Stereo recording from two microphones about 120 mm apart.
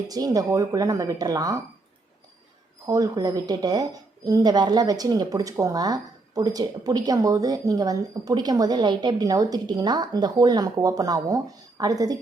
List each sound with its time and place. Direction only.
0.1 s speech: 30° right (ahead or behind)
2.8 s a woman's voice: 30° right (ahead or behind)